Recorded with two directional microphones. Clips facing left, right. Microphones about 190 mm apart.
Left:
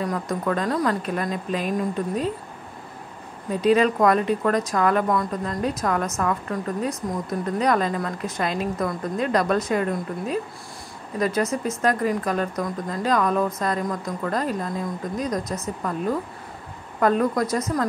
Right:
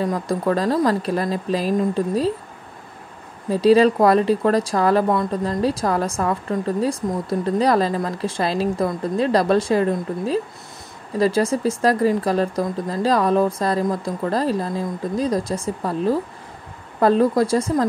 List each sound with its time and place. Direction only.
0.0 s a woman's voice: 30° right (ahead or behind)
3.4 s a woman's voice: 35° right (ahead or behind)